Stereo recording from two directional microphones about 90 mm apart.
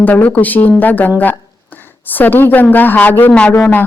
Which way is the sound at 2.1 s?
20° left (ahead or behind).